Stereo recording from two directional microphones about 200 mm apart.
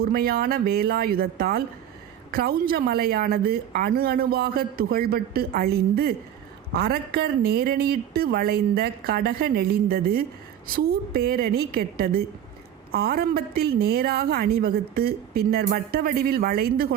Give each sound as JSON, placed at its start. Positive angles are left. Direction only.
{"t": 0.0, "sound": "a woman's voice", "side_deg": -50}